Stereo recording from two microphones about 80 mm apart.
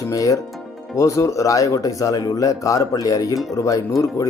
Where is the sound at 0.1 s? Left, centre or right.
Left.